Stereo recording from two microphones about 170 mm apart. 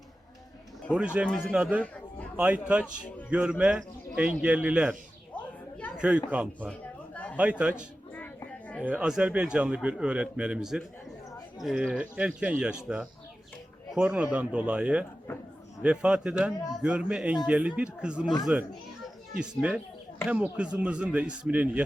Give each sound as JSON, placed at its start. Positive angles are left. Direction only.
{"t": 0.9, "sound": "a man's voice", "side_deg": -10}
{"t": 2.8, "sound": "speech", "side_deg": 10}
{"t": 3.2, "sound": "a man's voice", "side_deg": -5}
{"t": 6.0, "sound": "a man's voice", "side_deg": -5}
{"t": 6.7, "sound": "a sound", "side_deg": 10}
{"t": 7.6, "sound": "a man's voice", "side_deg": -10}
{"t": 19.4, "sound": "a man's voice", "side_deg": -5}